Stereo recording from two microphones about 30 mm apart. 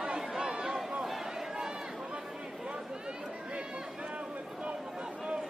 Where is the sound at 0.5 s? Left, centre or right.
Centre; by 4.7 s right.